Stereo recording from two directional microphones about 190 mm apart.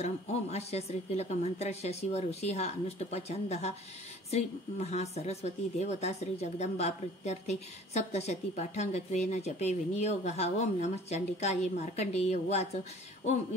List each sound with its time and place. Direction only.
0.0 s a woman's voice: 35° left (ahead or behind)